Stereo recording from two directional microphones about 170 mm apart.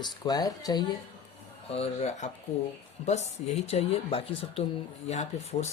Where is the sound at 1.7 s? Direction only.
40° left (ahead or behind).